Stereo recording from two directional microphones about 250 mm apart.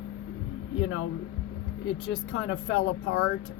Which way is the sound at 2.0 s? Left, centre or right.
Left.